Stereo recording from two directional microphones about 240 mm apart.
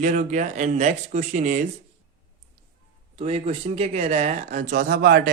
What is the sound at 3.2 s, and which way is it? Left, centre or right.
Speech, right.